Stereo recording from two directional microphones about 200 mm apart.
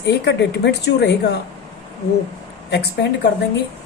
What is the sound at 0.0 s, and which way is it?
A woman's voice, 60° left (ahead or behind).